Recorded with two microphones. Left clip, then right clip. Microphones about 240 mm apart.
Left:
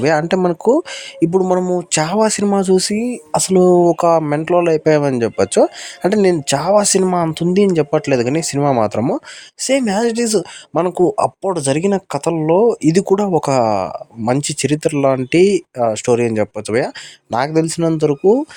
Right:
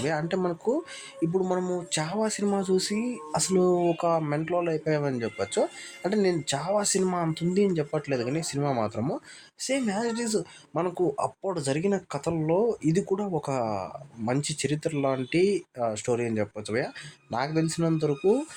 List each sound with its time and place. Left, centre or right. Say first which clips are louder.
0.0 s speech: left 13 dB; left